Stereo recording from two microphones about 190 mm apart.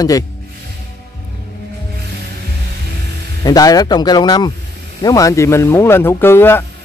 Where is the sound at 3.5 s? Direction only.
20° left (ahead or behind).